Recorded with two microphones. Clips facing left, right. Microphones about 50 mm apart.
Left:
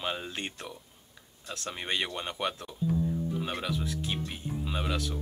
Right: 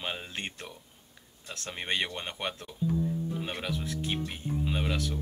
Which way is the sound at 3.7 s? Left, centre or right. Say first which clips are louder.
Even; right.